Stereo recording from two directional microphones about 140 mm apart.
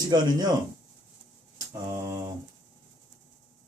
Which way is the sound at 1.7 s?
25° right (ahead or behind).